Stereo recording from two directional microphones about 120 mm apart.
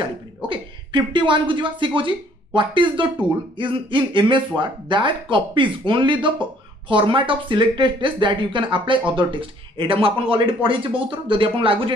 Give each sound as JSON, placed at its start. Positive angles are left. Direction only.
{"t": 0.5, "sound": "speech", "side_deg": -40}